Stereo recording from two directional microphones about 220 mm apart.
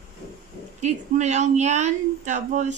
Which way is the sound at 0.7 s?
30° right (ahead or behind).